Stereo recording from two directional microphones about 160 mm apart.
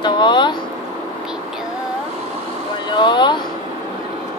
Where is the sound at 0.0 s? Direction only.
30° left (ahead or behind).